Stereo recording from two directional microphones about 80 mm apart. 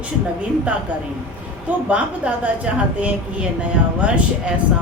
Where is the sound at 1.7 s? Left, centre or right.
Centre.